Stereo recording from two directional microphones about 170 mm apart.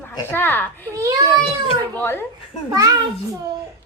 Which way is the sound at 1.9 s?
15° left (ahead or behind).